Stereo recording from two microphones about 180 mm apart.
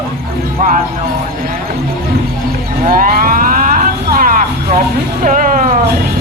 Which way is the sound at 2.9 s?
55° right (ahead or behind).